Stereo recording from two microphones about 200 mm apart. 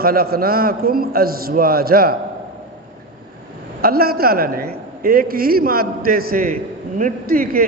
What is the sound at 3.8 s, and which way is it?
A man's voice, 50° right (ahead or behind).